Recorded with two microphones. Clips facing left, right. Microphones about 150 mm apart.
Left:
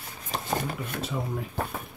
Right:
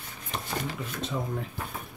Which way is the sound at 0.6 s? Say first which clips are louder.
Left 2 dB; 55° left (ahead or behind).